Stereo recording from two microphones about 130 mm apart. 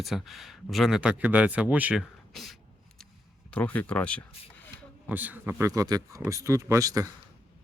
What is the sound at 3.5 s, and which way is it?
Speech, 10° left (ahead or behind).